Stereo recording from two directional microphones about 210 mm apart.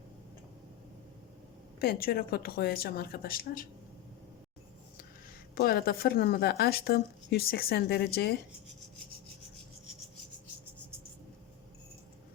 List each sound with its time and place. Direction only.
1.8 s speech: 45° left (ahead or behind)
5.5 s speech: 50° left (ahead or behind)